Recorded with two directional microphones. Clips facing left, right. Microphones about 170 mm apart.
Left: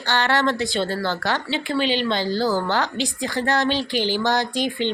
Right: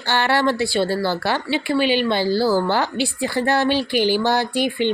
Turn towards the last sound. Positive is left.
turn(degrees=-10)  # may be behind; listen again after turning